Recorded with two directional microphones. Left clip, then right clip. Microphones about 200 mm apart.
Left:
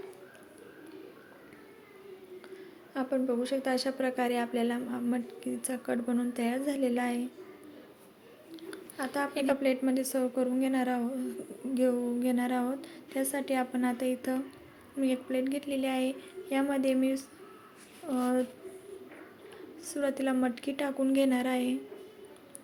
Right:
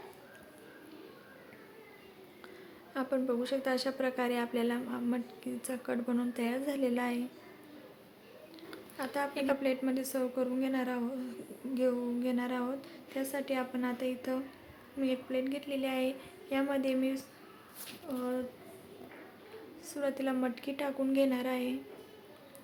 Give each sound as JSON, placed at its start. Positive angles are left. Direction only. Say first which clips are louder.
{"t": 2.9, "sound": "speech", "louder": "left 2 dB", "side_deg": 10}
{"t": 8.5, "sound": "a woman's voice", "louder": "left 3 dB", "side_deg": 15}
{"t": 18.1, "sound": "speech", "louder": "left 6 dB", "side_deg": 35}
{"t": 19.8, "sound": "a woman's voice", "louder": "left 3 dB", "side_deg": 20}